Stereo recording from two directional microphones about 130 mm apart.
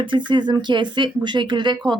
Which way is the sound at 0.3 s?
35° right (ahead or behind).